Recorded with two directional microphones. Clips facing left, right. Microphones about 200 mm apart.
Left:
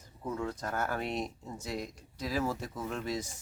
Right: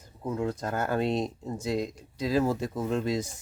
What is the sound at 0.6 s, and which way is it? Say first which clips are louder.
Speech: right 6 dB; 20° right (ahead or behind).